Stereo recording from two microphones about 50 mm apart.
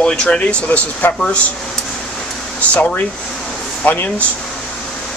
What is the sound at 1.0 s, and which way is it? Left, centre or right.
Speech, left.